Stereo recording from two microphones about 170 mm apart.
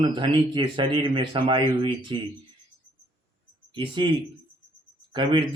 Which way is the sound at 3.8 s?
30° right (ahead or behind).